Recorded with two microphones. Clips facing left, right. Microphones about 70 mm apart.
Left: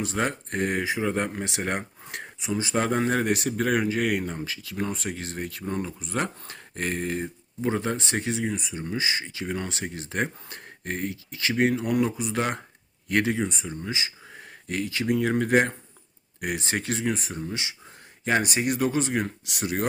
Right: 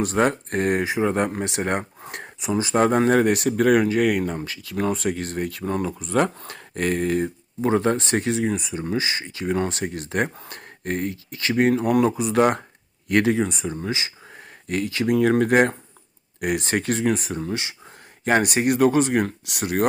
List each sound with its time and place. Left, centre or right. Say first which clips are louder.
0.3 s speech: right 6 dB; right
2.4 s speech: right 6 dB; right
16.4 s speech: right 6 dB; right
18.3 s speech: right 5 dB; right